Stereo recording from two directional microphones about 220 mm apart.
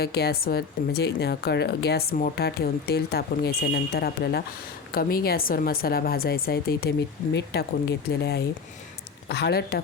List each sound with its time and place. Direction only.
0.0 s a woman's voice: 45° left (ahead or behind)